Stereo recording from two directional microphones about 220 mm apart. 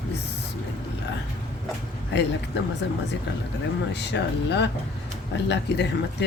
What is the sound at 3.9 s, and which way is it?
Speech, 50° left (ahead or behind).